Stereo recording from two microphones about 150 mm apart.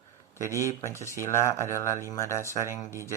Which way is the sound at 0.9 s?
20° left (ahead or behind).